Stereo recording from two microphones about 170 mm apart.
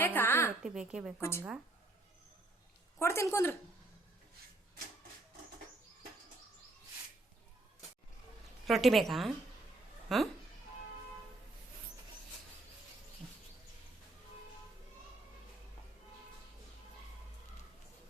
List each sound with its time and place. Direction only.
0.0 s a sound: 10° left (ahead or behind)
0.6 s a woman's voice: 5° right (ahead or behind)
1.2 s a woman's voice: 15° left (ahead or behind)
3.0 s a woman's voice: 15° left (ahead or behind)
8.6 s a woman's voice: centre (ahead or behind)